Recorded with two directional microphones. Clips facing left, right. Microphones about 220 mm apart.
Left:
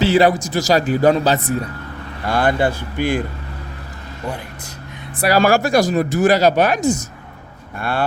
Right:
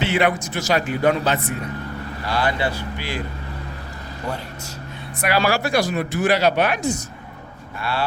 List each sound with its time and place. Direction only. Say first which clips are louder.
0.0 s speech: left 6 dB; 35° left (ahead or behind)
2.2 s speech: left 6 dB; 50° left (ahead or behind)
5.2 s speech: left 5 dB; 45° left (ahead or behind)